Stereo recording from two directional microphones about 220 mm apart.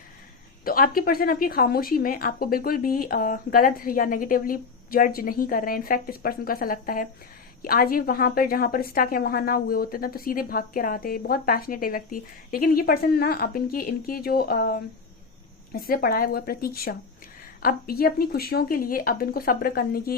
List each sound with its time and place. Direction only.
0.6 s a woman's voice: 40° left (ahead or behind)